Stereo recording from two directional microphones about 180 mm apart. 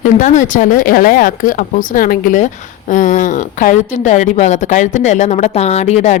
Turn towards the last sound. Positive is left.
turn(degrees=40)  # may be behind; listen again after turning